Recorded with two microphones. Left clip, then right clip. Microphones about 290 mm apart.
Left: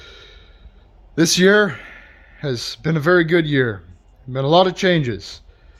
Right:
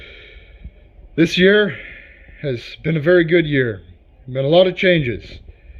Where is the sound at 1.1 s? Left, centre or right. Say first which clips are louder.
Right 1 dB; centre.